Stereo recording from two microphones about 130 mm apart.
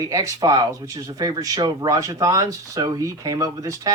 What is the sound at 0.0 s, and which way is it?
Speech, 25° right (ahead or behind).